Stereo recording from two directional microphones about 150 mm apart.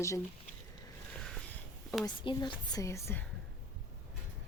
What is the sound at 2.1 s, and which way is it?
Speech, 30° left (ahead or behind).